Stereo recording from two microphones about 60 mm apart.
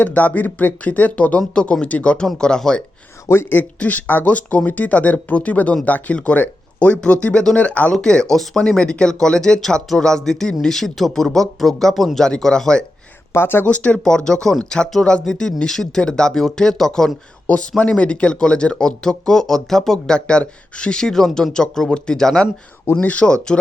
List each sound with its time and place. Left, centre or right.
0.0 s speech: left
2.2 s speech: centre
3.5 s speech: left; by 12.8 s centre
13.3 s speech: left
13.7 s speech: left
17.4 s speech: left
23.0 s speech: left